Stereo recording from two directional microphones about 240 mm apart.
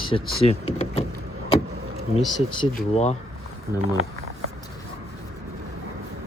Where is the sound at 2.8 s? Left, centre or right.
Left.